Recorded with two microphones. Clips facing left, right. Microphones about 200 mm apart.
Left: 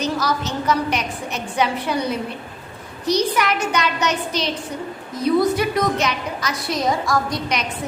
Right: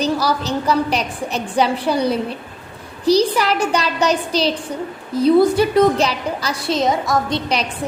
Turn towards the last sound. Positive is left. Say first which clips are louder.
# right 3 dB
turn(degrees=-30)  # may be behind; listen again after turning